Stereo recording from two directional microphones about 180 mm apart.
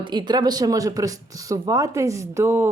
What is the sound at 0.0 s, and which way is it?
Speech, 25° right (ahead or behind).